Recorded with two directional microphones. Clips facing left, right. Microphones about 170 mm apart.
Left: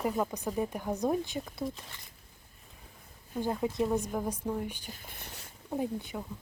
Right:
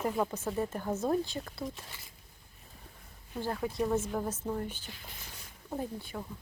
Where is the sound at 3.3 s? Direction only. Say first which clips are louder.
Left 3 dB; 15° left (ahead or behind).